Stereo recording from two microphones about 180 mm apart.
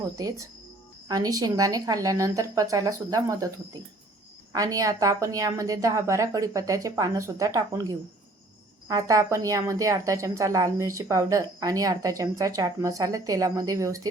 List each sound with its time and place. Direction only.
0.2 s a woman's voice: 20° right (ahead or behind)